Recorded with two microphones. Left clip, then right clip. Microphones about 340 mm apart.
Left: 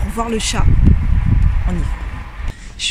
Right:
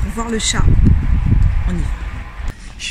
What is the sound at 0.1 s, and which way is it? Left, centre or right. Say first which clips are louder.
Speech: even; centre.